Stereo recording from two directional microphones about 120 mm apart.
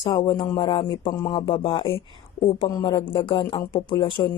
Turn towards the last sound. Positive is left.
turn(degrees=40)  # may be behind; listen again after turning